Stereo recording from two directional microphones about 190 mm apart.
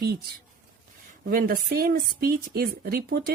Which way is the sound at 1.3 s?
50° right (ahead or behind).